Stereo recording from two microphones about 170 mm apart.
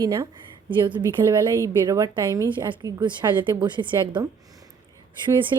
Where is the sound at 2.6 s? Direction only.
25° right (ahead or behind).